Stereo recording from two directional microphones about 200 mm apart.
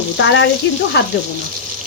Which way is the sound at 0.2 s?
65° left (ahead or behind).